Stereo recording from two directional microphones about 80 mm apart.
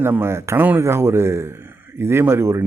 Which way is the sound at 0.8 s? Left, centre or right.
Right.